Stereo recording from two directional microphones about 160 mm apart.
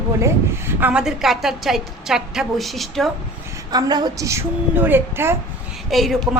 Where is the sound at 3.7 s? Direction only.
25° right (ahead or behind).